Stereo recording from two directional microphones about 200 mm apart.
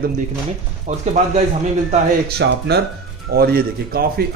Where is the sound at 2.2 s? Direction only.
55° right (ahead or behind).